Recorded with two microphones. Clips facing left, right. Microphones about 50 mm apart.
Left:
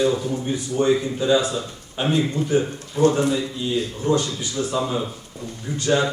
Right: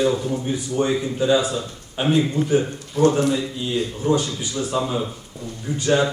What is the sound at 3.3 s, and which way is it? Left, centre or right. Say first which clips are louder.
Speech: even; centre.